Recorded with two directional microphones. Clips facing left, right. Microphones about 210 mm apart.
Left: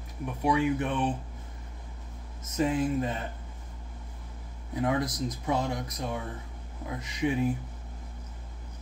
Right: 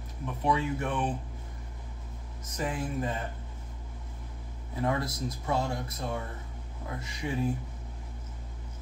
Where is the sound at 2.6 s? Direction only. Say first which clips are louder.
Left 6 dB; 20° left (ahead or behind).